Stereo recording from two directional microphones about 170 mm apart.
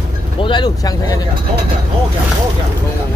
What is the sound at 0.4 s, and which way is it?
Speech, 25° left (ahead or behind).